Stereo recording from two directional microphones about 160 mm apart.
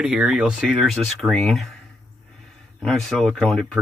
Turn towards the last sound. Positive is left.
turn(degrees=5)  # may be behind; listen again after turning